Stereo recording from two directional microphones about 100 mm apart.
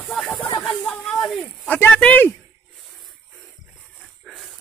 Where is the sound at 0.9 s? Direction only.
15° left (ahead or behind).